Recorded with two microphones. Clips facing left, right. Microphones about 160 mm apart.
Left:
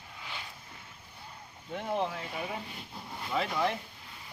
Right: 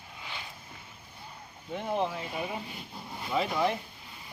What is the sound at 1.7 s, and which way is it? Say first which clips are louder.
Speech: right 2 dB; centre (ahead or behind).